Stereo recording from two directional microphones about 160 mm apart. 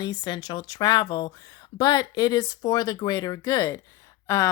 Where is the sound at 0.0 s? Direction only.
25° left (ahead or behind).